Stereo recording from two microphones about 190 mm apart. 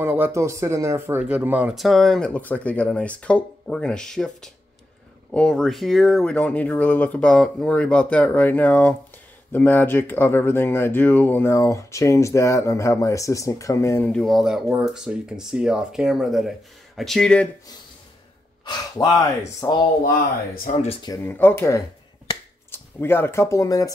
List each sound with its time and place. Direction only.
0.0 s speech: 10° right (ahead or behind); by 17.5 s 5° left (ahead or behind)
18.7 s speech: 20° left (ahead or behind)
20.5 s speech: 45° left (ahead or behind)
21.0 s speech: 15° left (ahead or behind)